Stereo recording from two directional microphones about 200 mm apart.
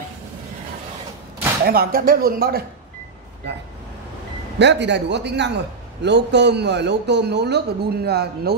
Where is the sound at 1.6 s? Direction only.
50° right (ahead or behind).